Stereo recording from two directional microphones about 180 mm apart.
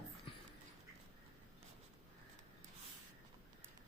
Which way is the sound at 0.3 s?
30° left (ahead or behind).